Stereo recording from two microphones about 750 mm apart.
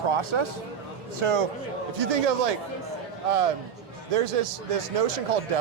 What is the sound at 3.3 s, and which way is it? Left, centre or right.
Speech, right.